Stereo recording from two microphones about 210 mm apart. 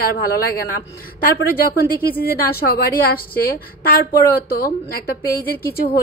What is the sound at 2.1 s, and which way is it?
Speech, 45° left (ahead or behind).